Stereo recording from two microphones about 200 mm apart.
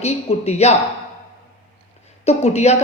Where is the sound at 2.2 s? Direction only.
35° left (ahead or behind).